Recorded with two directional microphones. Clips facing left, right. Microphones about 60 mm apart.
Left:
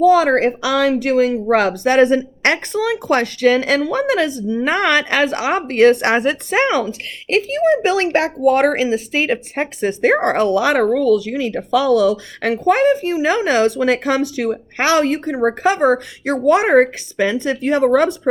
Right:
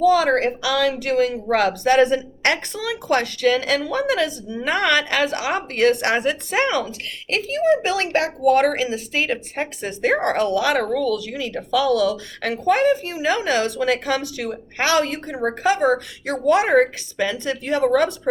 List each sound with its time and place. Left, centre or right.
0.0 s a woman's voice: left